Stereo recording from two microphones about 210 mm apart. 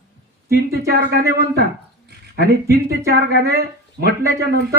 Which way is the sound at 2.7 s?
50° right (ahead or behind).